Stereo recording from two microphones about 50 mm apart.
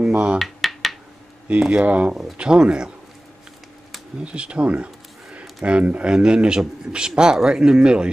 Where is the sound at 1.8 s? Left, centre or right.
Right.